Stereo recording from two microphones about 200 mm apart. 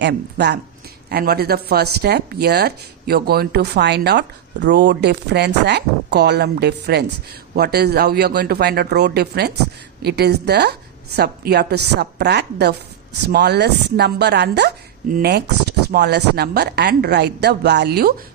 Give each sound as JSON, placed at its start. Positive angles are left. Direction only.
{"t": 0.0, "sound": "a man's voice", "side_deg": -55}